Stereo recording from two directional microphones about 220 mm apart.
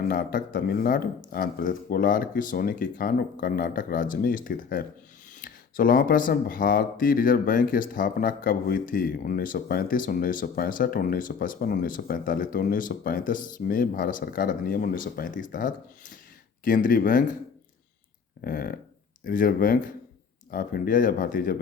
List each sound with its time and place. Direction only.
0.0 s speech: 40° left (ahead or behind)
18.4 s a sound: 40° left (ahead or behind)
19.2 s speech: 40° left (ahead or behind)